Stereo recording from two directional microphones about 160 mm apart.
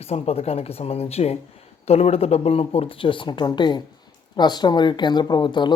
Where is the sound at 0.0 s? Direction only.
40° left (ahead or behind).